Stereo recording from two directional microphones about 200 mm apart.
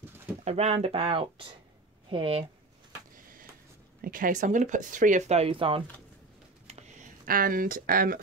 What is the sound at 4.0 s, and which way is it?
Speech, 45° right (ahead or behind).